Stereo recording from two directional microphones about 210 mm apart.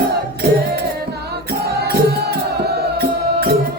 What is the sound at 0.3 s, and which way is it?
Music, 50° right (ahead or behind).